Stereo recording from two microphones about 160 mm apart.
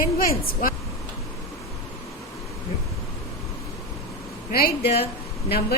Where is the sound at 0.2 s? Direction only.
65° left (ahead or behind).